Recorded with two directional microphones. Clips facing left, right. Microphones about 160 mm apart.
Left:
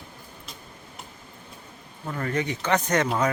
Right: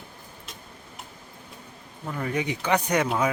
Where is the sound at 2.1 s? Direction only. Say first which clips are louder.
Even; 10° right (ahead or behind).